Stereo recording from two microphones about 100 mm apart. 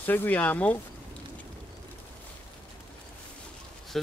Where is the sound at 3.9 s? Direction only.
Centre (ahead or behind).